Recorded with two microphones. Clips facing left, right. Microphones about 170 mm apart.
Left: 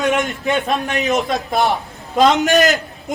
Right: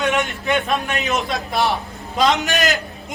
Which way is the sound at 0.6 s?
40° left (ahead or behind).